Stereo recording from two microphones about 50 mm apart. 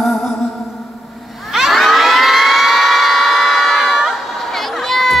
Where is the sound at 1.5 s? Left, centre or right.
Centre.